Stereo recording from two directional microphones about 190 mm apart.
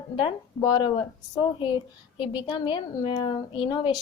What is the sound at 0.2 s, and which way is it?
A child's voice, 25° left (ahead or behind).